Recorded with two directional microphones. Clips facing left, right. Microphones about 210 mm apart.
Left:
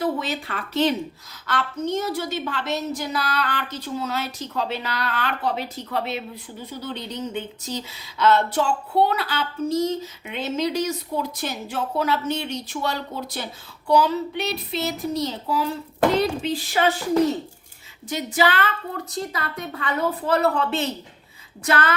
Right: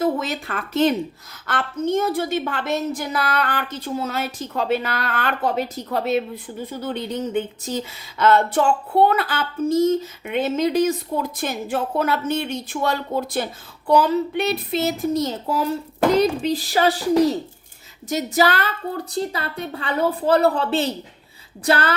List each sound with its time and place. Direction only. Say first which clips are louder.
0.0 s a woman's voice: right 3 dB; 45° right (ahead or behind)
19.1 s a woman's voice: right 3 dB; 30° right (ahead or behind)